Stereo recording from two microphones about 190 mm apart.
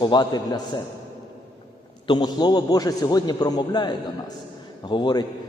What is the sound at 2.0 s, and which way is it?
A man's voice, 20° left (ahead or behind).